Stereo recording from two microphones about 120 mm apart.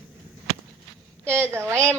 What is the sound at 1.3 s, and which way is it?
Speech, 20° right (ahead or behind).